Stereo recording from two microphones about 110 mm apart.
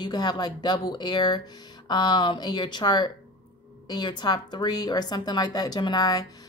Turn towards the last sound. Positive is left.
turn(degrees=35)  # may be behind; listen again after turning